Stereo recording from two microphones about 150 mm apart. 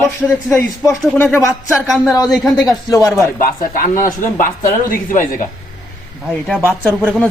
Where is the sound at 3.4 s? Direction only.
65° left (ahead or behind).